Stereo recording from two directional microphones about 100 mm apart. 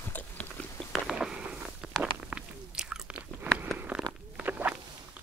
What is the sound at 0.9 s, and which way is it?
Walk, 5° right (ahead or behind).